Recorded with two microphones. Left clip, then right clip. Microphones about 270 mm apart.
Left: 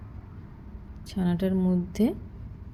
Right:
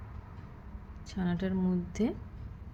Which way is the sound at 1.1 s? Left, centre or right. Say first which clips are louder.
Left 6 dB; centre.